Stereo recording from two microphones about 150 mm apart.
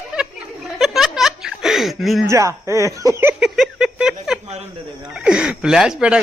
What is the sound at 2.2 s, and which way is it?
Speech, 20° right (ahead or behind).